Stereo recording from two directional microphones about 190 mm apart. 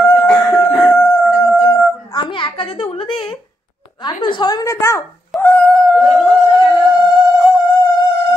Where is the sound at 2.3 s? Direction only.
25° left (ahead or behind).